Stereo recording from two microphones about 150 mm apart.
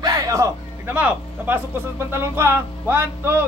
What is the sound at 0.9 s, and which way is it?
Speech, 10° right (ahead or behind).